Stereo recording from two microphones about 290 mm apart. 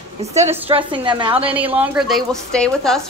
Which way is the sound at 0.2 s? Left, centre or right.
Right.